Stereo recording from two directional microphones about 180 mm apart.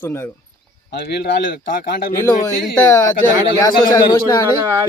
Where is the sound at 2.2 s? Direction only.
15° left (ahead or behind).